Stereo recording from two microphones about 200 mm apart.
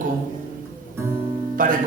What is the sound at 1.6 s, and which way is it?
Speech, 40° right (ahead or behind).